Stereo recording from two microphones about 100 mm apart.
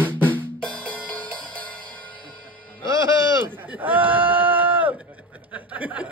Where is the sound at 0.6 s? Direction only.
10° left (ahead or behind).